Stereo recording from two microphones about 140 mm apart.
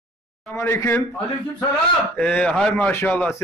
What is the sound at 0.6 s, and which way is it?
Speech, 20° left (ahead or behind).